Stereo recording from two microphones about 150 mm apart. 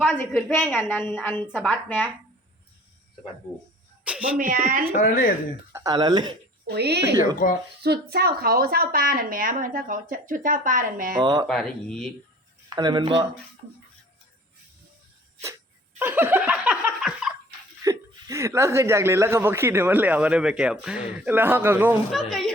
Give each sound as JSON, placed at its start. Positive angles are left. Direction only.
{"t": 0.0, "sound": "a woman's voice", "side_deg": 15}
{"t": 4.0, "sound": "a sound", "side_deg": -10}
{"t": 4.4, "sound": "speech", "side_deg": -65}
{"t": 4.9, "sound": "speech", "side_deg": 60}
{"t": 5.7, "sound": "speech", "side_deg": -25}
{"t": 6.7, "sound": "speech", "side_deg": -90}
{"t": 7.4, "sound": "speech", "side_deg": 65}
{"t": 7.8, "sound": "a woman's voice", "side_deg": -90}
{"t": 11.2, "sound": "speech", "side_deg": -30}
{"t": 11.4, "sound": "speech", "side_deg": 5}
{"t": 12.7, "sound": "speech", "side_deg": -30}
{"t": 16.0, "sound": "laughter", "side_deg": -15}
{"t": 17.8, "sound": "speech", "side_deg": -20}
{"t": 22.1, "sound": "speech", "side_deg": 0}